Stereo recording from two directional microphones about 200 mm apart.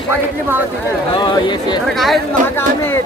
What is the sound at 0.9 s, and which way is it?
Speech, 20° left (ahead or behind).